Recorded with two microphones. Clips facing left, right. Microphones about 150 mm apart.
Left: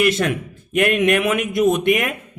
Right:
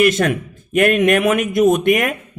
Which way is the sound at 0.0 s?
50° right (ahead or behind).